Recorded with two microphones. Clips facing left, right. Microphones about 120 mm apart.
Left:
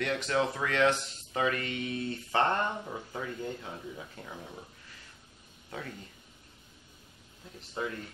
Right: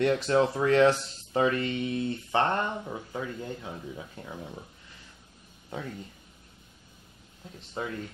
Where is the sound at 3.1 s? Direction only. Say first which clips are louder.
Even; 15° right (ahead or behind).